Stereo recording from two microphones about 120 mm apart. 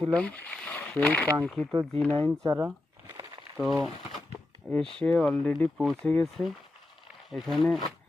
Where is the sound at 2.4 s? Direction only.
30° right (ahead or behind).